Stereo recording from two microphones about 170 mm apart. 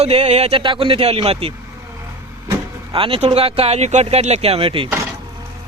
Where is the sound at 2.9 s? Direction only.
30° right (ahead or behind).